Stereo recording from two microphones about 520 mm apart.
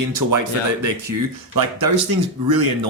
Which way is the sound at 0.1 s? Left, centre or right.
Right.